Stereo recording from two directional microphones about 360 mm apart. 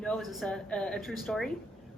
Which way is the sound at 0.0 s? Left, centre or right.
Centre.